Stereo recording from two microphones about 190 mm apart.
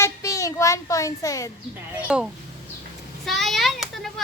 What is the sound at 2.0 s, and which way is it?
Speech, 5° right (ahead or behind).